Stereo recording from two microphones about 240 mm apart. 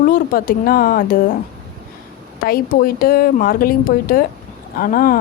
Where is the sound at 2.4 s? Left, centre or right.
Left.